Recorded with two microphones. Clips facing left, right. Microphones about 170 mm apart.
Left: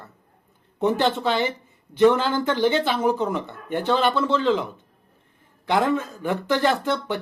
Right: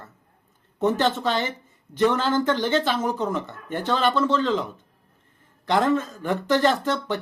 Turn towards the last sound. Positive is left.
turn(degrees=15)  # may be behind; listen again after turning